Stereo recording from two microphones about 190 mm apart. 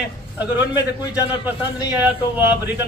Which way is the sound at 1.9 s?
10° right (ahead or behind).